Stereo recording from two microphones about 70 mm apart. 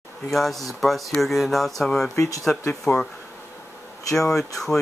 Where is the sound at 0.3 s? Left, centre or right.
Centre.